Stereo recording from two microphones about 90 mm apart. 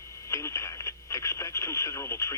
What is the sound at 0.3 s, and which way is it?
Radio, 35° left (ahead or behind).